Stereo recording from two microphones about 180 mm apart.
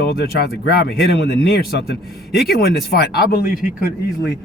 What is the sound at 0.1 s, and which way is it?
Speech, 60° left (ahead or behind).